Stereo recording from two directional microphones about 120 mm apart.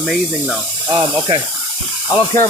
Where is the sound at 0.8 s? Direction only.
30° right (ahead or behind).